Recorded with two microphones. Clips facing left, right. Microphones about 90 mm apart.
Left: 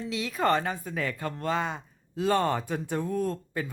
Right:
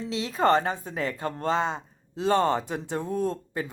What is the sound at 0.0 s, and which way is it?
Speech, 30° right (ahead or behind).